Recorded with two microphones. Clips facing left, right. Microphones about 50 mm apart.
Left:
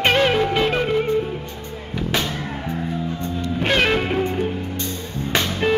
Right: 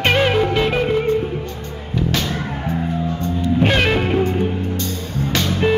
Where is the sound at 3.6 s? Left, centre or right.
Centre.